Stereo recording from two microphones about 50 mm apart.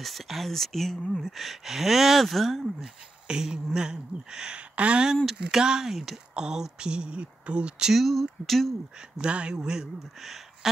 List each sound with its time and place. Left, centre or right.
0.0 s speech: centre
2.8 s speech: centre
5.0 s speech: centre
7.9 s speech: centre
9.2 s speech: right; by 10.7 s centre